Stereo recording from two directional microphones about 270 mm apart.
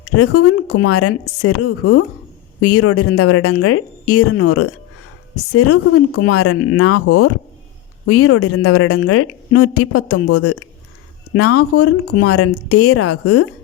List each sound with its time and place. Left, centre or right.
0.2 s a woman's voice: left